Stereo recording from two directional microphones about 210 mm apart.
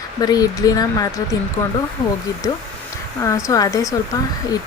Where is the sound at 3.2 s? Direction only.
15° left (ahead or behind).